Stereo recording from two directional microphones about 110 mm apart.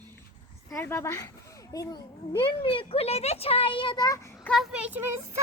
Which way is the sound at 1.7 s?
35° left (ahead or behind).